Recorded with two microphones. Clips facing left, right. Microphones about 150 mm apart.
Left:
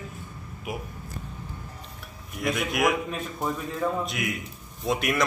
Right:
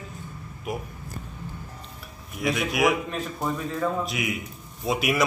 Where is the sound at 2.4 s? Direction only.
Centre (ahead or behind).